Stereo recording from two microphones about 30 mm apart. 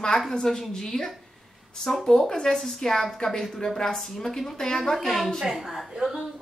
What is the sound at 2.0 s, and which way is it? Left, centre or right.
A woman's voice, centre.